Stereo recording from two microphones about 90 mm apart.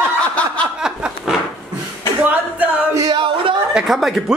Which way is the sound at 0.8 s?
5° right (ahead or behind).